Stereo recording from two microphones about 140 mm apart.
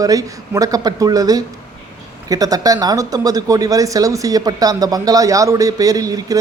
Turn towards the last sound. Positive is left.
turn(degrees=-25)  # may be behind; listen again after turning